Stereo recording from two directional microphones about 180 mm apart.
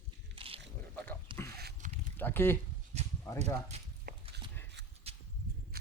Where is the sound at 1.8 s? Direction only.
45° right (ahead or behind).